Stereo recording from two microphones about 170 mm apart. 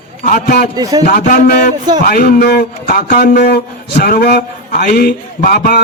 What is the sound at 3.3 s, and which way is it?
A man's voice, 55° left (ahead or behind).